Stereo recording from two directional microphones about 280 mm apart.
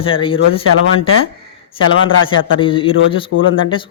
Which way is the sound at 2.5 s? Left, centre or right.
Centre.